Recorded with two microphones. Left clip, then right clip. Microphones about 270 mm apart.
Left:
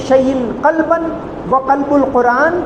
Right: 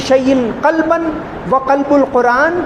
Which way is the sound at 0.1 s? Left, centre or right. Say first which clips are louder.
Left 1 dB; right.